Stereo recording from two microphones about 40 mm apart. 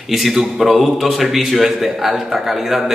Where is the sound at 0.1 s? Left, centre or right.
Centre.